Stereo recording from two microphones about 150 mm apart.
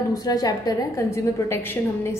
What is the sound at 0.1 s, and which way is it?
A woman's voice, 25° left (ahead or behind).